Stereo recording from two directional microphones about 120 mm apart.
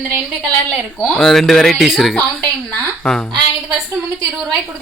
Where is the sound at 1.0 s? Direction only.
5° left (ahead or behind).